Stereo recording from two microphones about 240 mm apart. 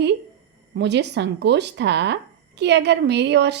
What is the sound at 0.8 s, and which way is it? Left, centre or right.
A woman's voice, right.